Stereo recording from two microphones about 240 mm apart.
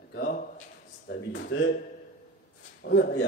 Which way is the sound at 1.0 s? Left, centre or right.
Left.